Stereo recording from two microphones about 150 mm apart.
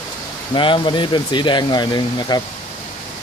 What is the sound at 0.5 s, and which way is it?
Speech, 35° left (ahead or behind).